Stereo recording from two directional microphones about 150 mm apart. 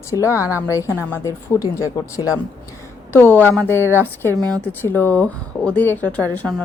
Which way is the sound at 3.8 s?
15° right (ahead or behind).